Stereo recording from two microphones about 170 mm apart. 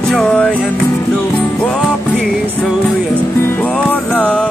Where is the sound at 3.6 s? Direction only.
10° left (ahead or behind).